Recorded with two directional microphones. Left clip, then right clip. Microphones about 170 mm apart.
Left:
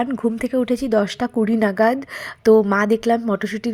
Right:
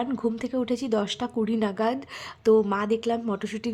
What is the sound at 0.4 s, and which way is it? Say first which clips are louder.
A woman's voice: left 7 dB; 25° left (ahead or behind).